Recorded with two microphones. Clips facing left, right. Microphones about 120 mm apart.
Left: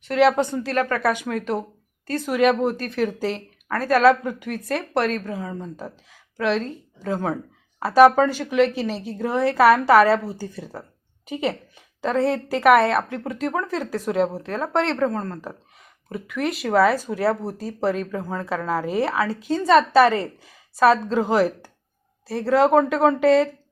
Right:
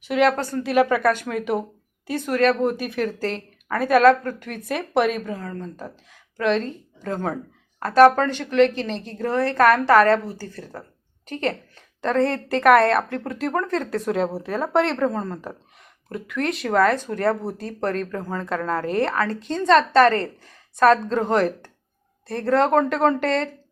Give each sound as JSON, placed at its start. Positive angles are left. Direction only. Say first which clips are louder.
{"t": 0.1, "sound": "speech", "louder": "left 1 dB", "side_deg": 0}
{"t": 0.3, "sound": "a woman's voice", "louder": "left 4 dB", "side_deg": 20}
{"t": 0.6, "sound": "a woman's voice", "louder": "right 4 dB", "side_deg": -10}
{"t": 1.0, "sound": "a woman's voice", "louder": "right 2 dB", "side_deg": 10}
{"t": 1.3, "sound": "speech", "louder": "right 1 dB", "side_deg": 0}
{"t": 2.3, "sound": "a woman's voice", "louder": "even", "side_deg": 10}
{"t": 4.2, "sound": "a woman's voice", "louder": "left 1 dB", "side_deg": 15}
{"t": 4.4, "sound": "a woman's voice", "louder": "left 2 dB", "side_deg": 0}